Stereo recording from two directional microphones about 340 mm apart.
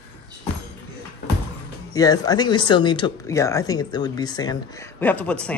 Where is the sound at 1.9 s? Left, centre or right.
Centre.